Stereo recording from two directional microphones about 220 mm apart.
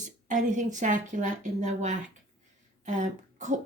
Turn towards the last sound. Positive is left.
turn(degrees=-35)  # may be behind; listen again after turning